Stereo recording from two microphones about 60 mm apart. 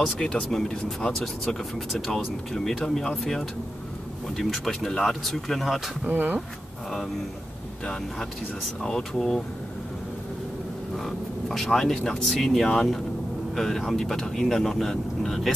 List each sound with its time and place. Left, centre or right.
0.2 s speech: centre
6.0 s speech: right
7.8 s speech: centre
11.0 s speech: centre